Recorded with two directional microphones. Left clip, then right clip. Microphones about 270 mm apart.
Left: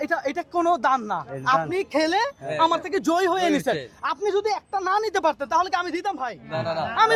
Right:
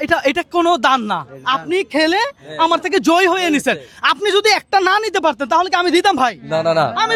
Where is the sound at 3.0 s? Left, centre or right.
Right.